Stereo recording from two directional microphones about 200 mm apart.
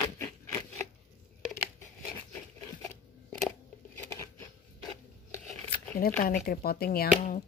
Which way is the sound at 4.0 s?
15° left (ahead or behind).